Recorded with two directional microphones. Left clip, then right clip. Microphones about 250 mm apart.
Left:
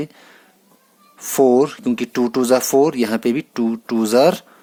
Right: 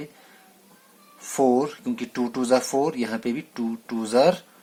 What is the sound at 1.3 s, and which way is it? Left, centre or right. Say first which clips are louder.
Speech: left 7 dB; left.